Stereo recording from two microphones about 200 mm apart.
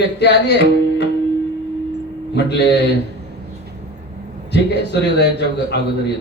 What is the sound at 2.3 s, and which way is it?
Speech, 60° left (ahead or behind).